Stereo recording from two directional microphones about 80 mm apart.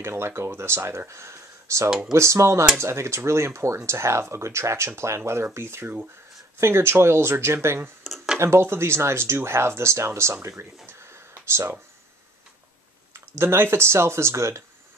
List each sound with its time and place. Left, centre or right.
0.0 s speech: right
1.9 s speech: centre
2.1 s speech: right
8.0 s a sound: centre
8.4 s speech: right
10.9 s a sound: right
13.4 s speech: right